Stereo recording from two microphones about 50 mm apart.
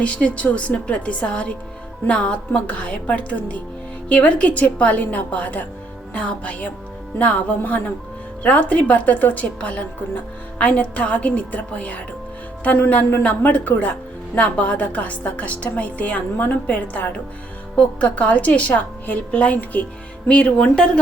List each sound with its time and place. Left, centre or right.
0.0 s a woman's voice: left
12.7 s a woman's voice: left